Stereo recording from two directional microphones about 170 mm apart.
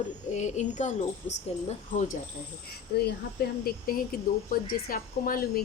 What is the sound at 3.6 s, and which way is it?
Speech, 60° left (ahead or behind).